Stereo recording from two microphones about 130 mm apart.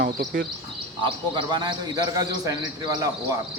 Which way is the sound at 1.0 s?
35° right (ahead or behind).